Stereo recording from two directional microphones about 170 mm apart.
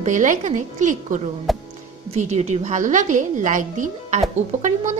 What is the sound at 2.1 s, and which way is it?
A woman's voice, 40° right (ahead or behind).